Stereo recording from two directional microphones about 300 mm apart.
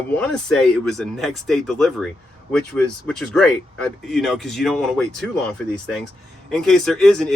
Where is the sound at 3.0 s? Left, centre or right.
Centre.